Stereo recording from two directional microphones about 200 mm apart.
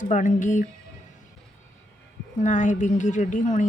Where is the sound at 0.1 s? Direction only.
40° left (ahead or behind).